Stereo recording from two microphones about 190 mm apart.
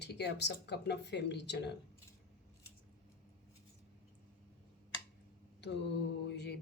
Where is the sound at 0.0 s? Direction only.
60° left (ahead or behind).